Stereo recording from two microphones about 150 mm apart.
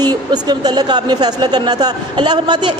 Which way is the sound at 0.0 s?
25° right (ahead or behind).